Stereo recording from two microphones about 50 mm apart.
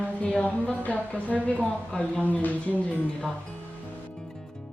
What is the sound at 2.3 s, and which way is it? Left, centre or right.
Speech, left.